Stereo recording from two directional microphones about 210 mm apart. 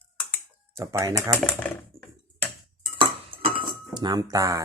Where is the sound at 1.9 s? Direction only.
Centre (ahead or behind).